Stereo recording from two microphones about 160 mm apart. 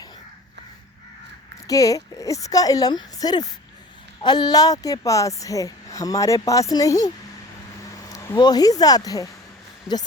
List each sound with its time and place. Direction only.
1.6 s a woman's voice: 20° left (ahead or behind)
7.9 s vehicle: 20° left (ahead or behind)
8.4 s a woman's voice: 25° left (ahead or behind)